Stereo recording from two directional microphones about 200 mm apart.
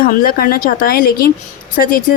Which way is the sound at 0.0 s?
45° left (ahead or behind).